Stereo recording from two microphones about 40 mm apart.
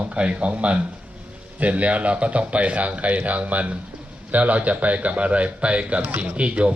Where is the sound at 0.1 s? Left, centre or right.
Right.